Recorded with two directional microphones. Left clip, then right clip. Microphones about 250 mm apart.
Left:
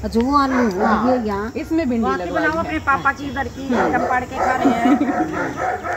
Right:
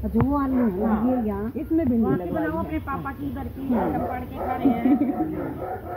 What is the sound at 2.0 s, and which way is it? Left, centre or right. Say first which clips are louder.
Speech: left 6 dB; right.